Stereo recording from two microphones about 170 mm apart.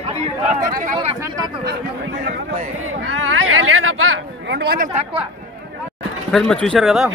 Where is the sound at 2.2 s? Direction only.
55° right (ahead or behind).